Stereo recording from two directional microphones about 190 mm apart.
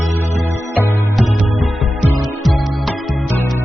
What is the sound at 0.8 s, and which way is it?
Music, 15° left (ahead or behind).